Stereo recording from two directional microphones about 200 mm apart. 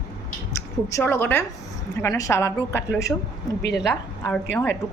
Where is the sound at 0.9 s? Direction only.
10° left (ahead or behind).